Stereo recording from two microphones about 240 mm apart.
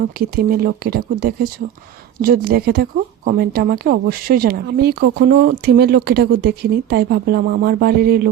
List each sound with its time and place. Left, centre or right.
0.2 s speech: right